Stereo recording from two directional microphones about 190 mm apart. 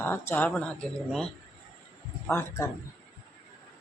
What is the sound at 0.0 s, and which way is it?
Speech, 10° left (ahead or behind).